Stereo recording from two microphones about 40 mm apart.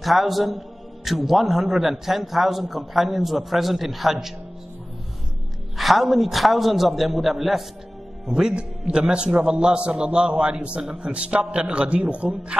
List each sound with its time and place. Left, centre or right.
0.0 s a man's voice: centre
5.8 s a man's voice: centre
8.3 s a man's voice: centre; by 12.3 s right